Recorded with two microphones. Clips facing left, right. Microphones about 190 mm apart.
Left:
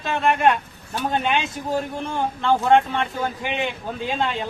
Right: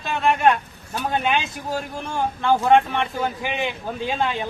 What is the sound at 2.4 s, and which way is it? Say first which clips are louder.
A man's voice: right 1 dB; 10° right (ahead or behind).